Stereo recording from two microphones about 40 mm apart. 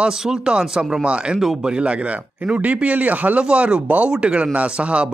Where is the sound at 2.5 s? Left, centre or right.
Right.